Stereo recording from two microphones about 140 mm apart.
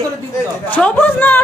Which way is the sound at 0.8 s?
10° left (ahead or behind).